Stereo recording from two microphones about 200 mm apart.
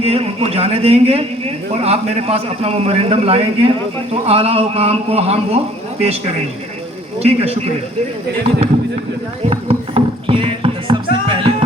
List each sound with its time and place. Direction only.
0.0 s a man's voice: 30° right (ahead or behind)
7.2 s a man's voice: 30° right (ahead or behind)
9.5 s music: 30° right (ahead or behind)